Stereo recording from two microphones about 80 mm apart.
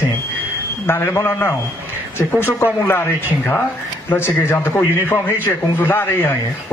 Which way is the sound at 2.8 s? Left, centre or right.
Left.